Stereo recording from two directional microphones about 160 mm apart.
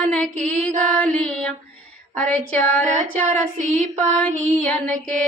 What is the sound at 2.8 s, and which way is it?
Child singing, 50° right (ahead or behind).